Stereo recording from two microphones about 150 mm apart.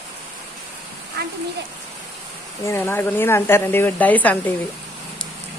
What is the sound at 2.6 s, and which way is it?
Speech, 15° left (ahead or behind).